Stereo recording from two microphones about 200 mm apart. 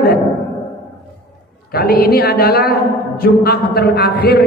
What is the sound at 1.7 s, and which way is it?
A woman's voice, 50° left (ahead or behind).